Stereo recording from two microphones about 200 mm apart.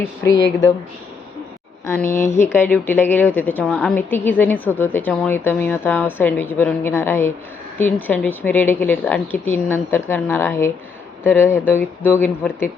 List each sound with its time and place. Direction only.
0.0 s a woman's voice: 15° left (ahead or behind)
2.2 s a woman's voice: 10° left (ahead or behind)